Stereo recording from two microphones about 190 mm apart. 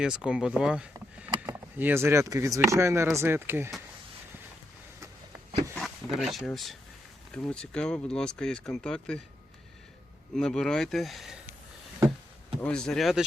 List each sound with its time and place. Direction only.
0.0 s speech: 5° right (ahead or behind)
0.9 s speech: 15° right (ahead or behind)
5.7 s speech: centre (ahead or behind)
10.3 s speech: 5° left (ahead or behind)
12.6 s speech: 5° left (ahead or behind)